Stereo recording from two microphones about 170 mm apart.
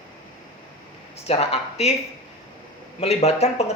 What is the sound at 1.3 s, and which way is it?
Speech, 35° left (ahead or behind).